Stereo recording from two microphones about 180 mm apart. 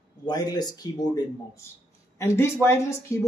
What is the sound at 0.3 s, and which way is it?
Speech, 20° left (ahead or behind).